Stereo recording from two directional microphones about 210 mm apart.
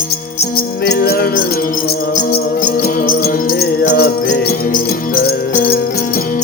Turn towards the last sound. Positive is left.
turn(degrees=45)  # may be behind; listen again after turning